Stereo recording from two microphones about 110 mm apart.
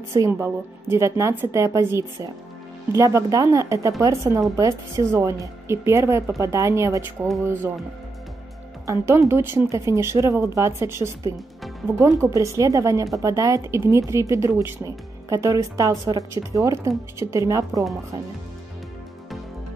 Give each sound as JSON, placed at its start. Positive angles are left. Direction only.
{"t": 0.1, "sound": "speech", "side_deg": -30}
{"t": 8.8, "sound": "speech", "side_deg": -25}